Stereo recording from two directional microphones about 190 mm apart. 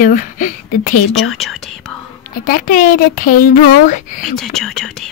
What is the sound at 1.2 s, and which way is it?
Speech, centre (ahead or behind).